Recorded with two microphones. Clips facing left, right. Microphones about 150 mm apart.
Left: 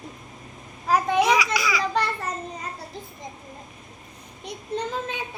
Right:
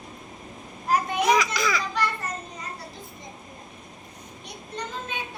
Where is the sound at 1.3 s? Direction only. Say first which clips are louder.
Even; 10° left (ahead or behind).